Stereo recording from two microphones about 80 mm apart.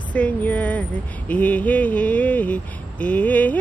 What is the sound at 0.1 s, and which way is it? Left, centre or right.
Speech, centre.